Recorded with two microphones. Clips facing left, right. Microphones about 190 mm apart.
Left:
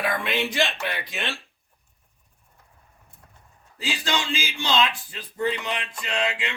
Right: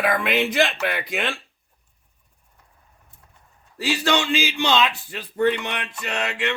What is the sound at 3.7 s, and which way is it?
Speech, 65° right (ahead or behind).